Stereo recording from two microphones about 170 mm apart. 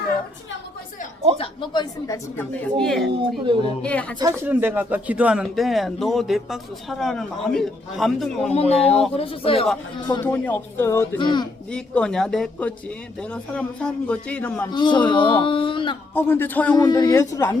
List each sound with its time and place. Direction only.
1.4 s speech: 25° left (ahead or behind)
2.7 s speech: 5° left (ahead or behind)
3.2 s a woman's voice: 30° right (ahead or behind)
3.8 s a man's voice: 5° left (ahead or behind)
4.4 s speech: 10° right (ahead or behind)
8.5 s speech: 35° left (ahead or behind)
8.9 s speech: centre (ahead or behind)
9.1 s speech: 35° left (ahead or behind)
10.2 s a man's voice: 10° left (ahead or behind)
11.2 s speech: 25° left (ahead or behind)
11.7 s a man's voice: 5° left (ahead or behind)
14.7 s speech: 25° left (ahead or behind)
16.1 s a man's voice: 15° left (ahead or behind)
16.7 s speech: 20° left (ahead or behind)